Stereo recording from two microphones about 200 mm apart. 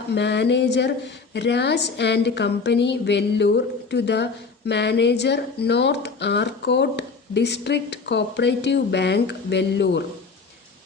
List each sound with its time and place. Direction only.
0.1 s a woman's voice: 60° left (ahead or behind)